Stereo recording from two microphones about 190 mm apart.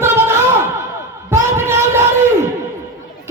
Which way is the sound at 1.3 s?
15° right (ahead or behind).